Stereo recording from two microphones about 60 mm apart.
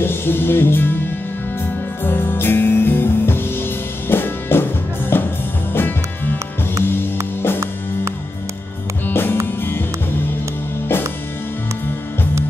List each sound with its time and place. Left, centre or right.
0.0 s music: left
2.0 s music: left
9.0 s music: left